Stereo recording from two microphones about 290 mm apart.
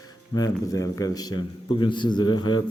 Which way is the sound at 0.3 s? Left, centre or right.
Centre.